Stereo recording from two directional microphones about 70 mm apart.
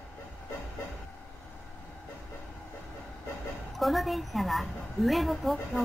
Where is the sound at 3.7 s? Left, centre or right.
Centre.